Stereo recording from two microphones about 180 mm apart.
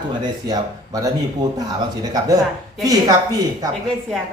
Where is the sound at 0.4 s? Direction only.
20° right (ahead or behind).